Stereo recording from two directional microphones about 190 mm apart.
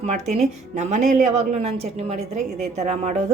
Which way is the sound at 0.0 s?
35° right (ahead or behind).